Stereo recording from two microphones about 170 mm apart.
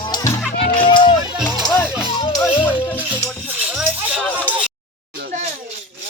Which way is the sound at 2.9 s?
10° right (ahead or behind).